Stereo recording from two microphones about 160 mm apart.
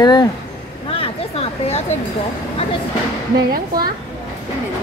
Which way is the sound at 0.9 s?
35° left (ahead or behind).